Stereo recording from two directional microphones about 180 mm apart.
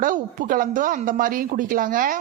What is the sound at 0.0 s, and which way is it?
Speech, 50° right (ahead or behind).